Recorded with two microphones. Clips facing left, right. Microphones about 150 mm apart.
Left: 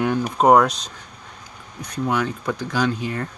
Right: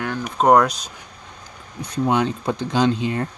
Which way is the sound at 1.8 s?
25° right (ahead or behind).